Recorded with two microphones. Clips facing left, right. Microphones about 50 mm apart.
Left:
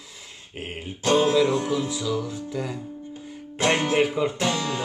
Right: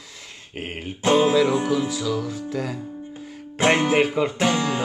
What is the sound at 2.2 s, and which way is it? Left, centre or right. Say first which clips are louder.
Music: right 3 dB; right.